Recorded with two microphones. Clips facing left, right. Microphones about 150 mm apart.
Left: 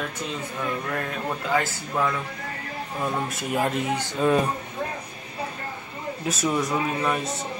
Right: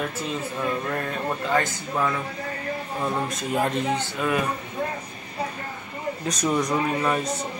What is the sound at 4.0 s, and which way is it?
Speech, 15° left (ahead or behind).